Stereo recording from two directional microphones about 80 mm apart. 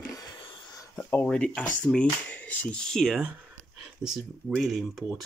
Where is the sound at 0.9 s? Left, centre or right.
Left.